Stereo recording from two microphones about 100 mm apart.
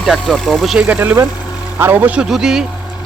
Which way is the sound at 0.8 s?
20° right (ahead or behind).